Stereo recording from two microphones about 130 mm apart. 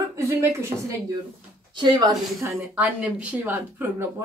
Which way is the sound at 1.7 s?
30° right (ahead or behind).